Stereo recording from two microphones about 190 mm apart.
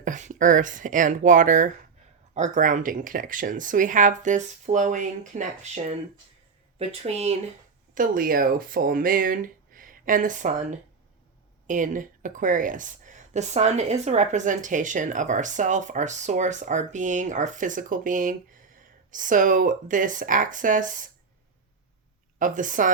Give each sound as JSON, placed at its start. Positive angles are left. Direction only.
{"t": 0.0, "sound": "speech", "side_deg": -40}
{"t": 7.9, "sound": "speech", "side_deg": -45}
{"t": 22.4, "sound": "speech", "side_deg": -45}